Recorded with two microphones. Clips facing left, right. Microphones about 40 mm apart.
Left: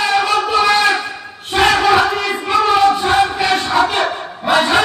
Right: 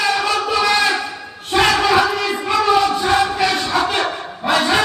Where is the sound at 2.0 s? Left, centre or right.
Left.